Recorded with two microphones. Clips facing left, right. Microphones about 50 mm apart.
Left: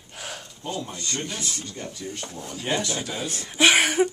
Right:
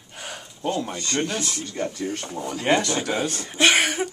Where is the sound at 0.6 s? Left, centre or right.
Right.